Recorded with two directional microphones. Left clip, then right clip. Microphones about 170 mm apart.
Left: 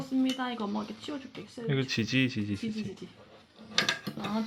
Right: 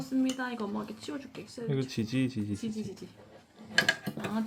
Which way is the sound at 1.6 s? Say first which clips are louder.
Left 3 dB; 5° right (ahead or behind).